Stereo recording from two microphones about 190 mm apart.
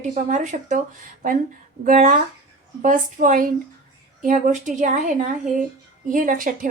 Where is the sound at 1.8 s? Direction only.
45° right (ahead or behind).